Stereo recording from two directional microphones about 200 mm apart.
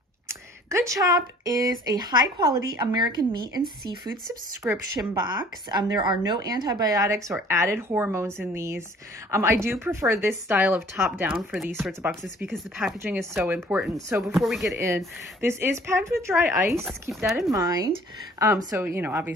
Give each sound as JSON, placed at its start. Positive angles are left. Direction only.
{"t": 0.3, "sound": "speech", "side_deg": -15}
{"t": 4.6, "sound": "speech", "side_deg": -10}
{"t": 13.3, "sound": "speech", "side_deg": -10}
{"t": 14.4, "sound": "speech", "side_deg": 0}
{"t": 14.8, "sound": "speech", "side_deg": -15}